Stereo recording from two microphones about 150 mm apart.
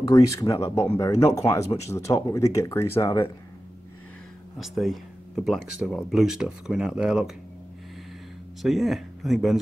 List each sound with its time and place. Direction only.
0.0 s speech: 20° left (ahead or behind)
4.6 s speech: centre (ahead or behind)
8.6 s speech: centre (ahead or behind)